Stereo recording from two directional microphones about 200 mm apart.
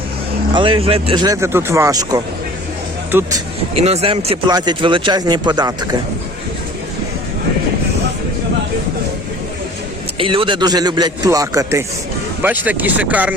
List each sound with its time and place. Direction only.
0.5 s speech: 25° right (ahead or behind)
3.8 s speech: 30° right (ahead or behind)
10.2 s speech: 25° right (ahead or behind); by 13.3 s 5° right (ahead or behind)